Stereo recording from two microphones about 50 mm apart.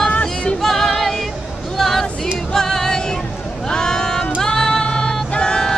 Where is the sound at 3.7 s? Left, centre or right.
Centre.